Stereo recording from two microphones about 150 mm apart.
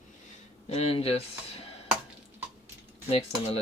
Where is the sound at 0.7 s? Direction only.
45° left (ahead or behind).